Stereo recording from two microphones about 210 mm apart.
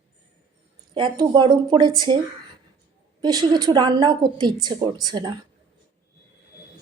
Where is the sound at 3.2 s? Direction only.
20° right (ahead or behind).